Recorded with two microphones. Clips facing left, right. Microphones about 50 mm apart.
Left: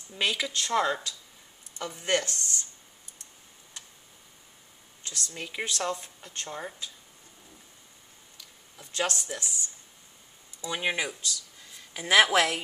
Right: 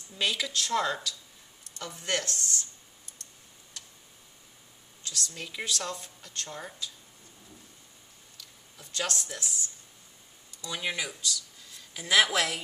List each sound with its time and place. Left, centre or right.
0.2 s speech: centre
3.8 s tick: left
5.0 s speech: left
9.0 s speech: centre
10.6 s speech: left